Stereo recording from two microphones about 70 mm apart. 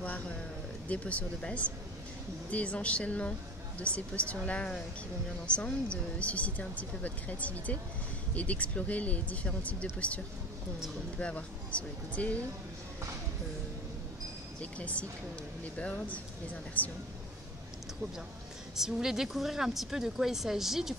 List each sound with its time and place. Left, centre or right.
0.8 s a woman's voice: centre
14.6 s speech: centre
16.8 s speech: left
18.8 s speech: centre